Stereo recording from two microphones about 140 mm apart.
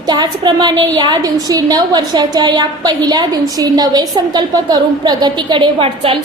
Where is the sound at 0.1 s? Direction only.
30° right (ahead or behind).